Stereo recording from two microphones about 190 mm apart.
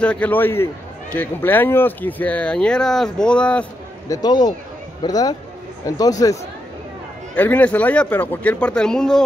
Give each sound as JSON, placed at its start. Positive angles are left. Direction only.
{"t": 0.0, "sound": "speech", "side_deg": 5}
{"t": 4.1, "sound": "a man's voice", "side_deg": 20}
{"t": 7.3, "sound": "speech", "side_deg": 10}